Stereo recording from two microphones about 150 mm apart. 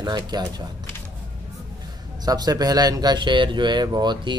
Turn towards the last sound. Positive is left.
turn(degrees=-30)  # may be behind; listen again after turning